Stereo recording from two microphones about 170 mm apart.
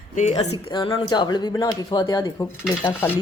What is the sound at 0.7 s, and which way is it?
Speech, 25° left (ahead or behind).